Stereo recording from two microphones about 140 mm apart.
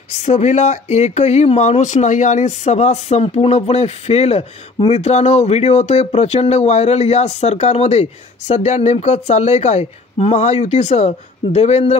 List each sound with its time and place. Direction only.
0.1 s speech: 50° left (ahead or behind)